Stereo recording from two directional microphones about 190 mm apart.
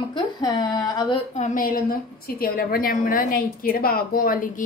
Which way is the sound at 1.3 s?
45° left (ahead or behind).